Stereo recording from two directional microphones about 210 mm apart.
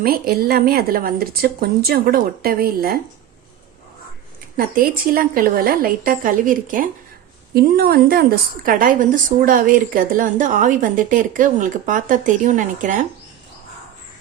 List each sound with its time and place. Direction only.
0.0 s speech: 45° right (ahead or behind)
4.5 s a woman's voice: 45° right (ahead or behind)